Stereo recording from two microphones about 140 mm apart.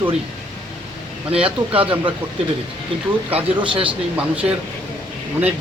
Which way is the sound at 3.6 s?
40° right (ahead or behind).